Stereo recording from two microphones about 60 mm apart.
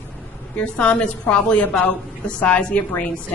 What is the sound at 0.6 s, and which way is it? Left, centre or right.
A woman's voice, centre.